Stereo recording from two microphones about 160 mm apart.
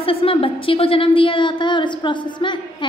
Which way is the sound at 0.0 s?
35° left (ahead or behind).